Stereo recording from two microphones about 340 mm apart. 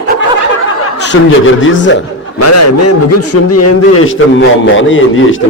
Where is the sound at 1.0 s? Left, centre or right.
Left.